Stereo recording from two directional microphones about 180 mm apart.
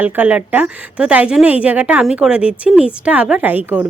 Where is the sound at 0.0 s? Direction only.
5° right (ahead or behind).